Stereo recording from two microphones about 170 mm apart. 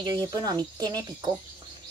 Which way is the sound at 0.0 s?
20° right (ahead or behind).